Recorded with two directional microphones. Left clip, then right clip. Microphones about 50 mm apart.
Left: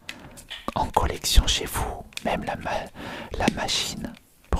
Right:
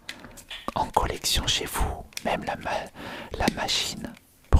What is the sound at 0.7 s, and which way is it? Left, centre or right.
Whispering, centre.